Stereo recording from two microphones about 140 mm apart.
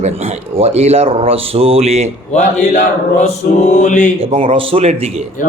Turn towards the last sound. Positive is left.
turn(degrees=-45)  # may be behind; listen again after turning